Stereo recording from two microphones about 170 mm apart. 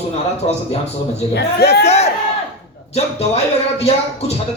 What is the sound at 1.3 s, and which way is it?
Speech, 75° left (ahead or behind).